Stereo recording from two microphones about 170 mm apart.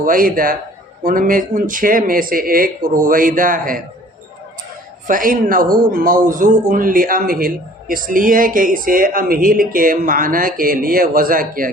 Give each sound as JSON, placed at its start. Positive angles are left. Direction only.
{"t": 0.0, "sound": "a man's voice", "side_deg": -55}
{"t": 5.0, "sound": "a man's voice", "side_deg": -50}